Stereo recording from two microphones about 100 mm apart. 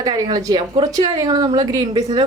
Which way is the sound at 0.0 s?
40° right (ahead or behind).